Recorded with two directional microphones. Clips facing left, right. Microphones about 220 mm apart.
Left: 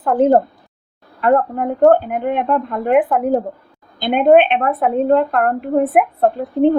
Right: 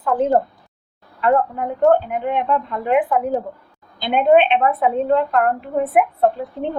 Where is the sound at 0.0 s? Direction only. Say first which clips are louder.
Left 4 dB; 55° left (ahead or behind).